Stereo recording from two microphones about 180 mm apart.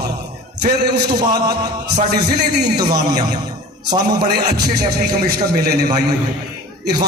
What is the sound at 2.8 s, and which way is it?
A man's voice, 20° right (ahead or behind).